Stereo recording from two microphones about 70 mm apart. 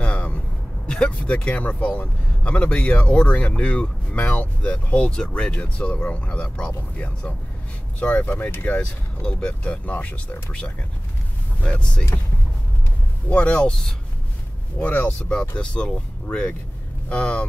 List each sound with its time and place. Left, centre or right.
0.0 s vehicle: centre
0.8 s speech: centre
13.3 s speech: centre